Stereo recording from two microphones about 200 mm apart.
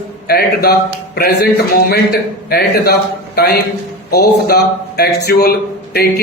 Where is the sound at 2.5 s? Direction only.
50° left (ahead or behind).